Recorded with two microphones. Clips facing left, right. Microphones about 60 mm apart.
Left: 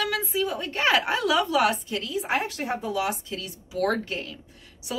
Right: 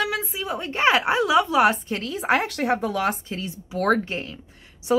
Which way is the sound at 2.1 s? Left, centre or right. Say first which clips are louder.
Right 5 dB; right.